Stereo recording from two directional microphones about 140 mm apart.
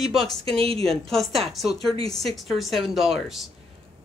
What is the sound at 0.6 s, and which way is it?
Speech, 45° right (ahead or behind).